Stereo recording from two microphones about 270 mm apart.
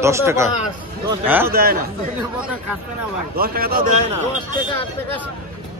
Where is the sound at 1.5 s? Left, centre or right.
Right.